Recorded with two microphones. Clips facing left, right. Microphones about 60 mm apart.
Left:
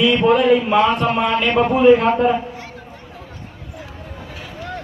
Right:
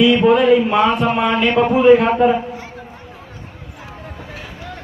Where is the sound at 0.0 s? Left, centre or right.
Centre.